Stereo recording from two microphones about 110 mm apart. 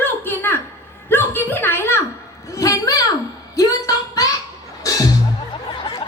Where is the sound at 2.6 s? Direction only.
30° left (ahead or behind).